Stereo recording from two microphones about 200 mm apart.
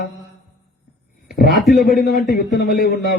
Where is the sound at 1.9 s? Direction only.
50° left (ahead or behind).